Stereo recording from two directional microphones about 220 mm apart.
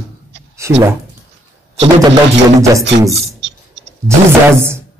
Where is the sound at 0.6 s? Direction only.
15° right (ahead or behind).